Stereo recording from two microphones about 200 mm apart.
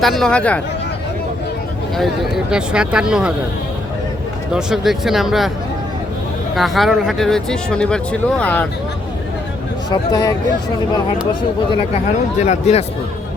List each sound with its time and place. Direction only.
0.0 s speech: centre (ahead or behind)
2.0 s speech: centre (ahead or behind)
4.5 s speech: centre (ahead or behind)
6.6 s speech: centre (ahead or behind)
9.9 s speech: 20° left (ahead or behind)
12.4 s speech: 35° left (ahead or behind)